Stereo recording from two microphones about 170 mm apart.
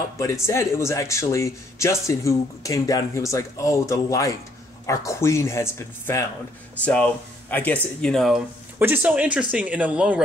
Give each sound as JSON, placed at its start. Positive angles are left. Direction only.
{"t": 0.2, "sound": "speech", "side_deg": 15}
{"t": 8.7, "sound": "speech", "side_deg": -10}